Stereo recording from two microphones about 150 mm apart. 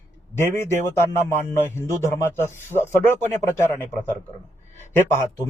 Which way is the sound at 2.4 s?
15° left (ahead or behind).